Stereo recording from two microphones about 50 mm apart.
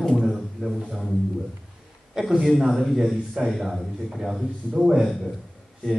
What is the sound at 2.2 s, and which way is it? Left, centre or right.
A man's voice, centre.